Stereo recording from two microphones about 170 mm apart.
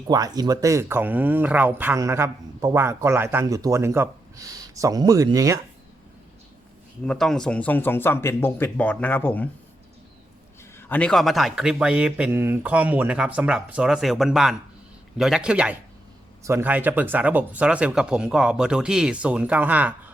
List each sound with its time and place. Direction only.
0.1 s speech: 20° right (ahead or behind)
7.0 s speech: 5° left (ahead or behind)
10.8 s speech: 10° left (ahead or behind); by 20.0 s 10° right (ahead or behind)